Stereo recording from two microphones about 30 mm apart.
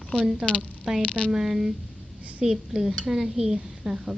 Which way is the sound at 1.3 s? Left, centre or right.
Centre.